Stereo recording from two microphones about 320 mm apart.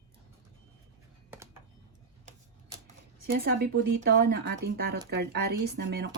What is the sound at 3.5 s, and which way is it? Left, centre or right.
Speech, right.